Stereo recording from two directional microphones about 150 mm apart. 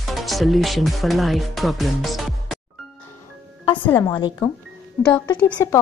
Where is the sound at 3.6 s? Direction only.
35° left (ahead or behind).